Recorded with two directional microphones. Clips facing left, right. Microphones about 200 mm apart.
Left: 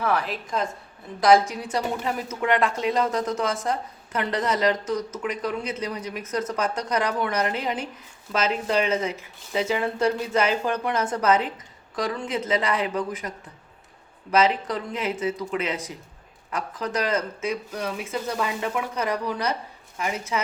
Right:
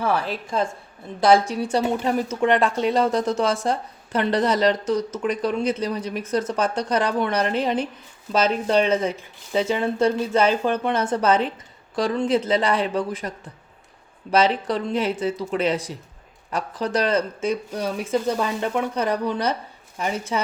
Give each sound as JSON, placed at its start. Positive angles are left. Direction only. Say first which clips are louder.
{"t": 0.0, "sound": "speech", "louder": "right 2 dB", "side_deg": -30}